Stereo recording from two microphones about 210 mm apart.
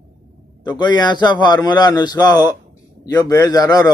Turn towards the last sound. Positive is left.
turn(degrees=15)  # may be behind; listen again after turning